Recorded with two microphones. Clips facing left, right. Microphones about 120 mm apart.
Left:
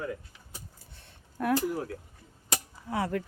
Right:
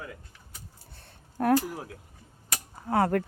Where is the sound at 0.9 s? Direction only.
40° right (ahead or behind).